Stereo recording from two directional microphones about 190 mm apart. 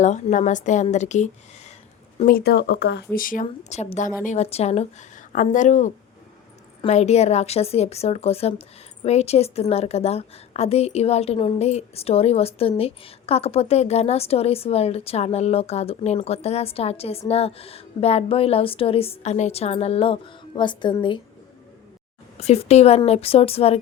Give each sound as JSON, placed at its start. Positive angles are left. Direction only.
{"t": 0.0, "sound": "a woman's voice", "side_deg": 40}
{"t": 2.1, "sound": "speech", "side_deg": 50}
{"t": 3.4, "sound": "a woman's voice", "side_deg": 35}
{"t": 22.4, "sound": "a woman's voice", "side_deg": 35}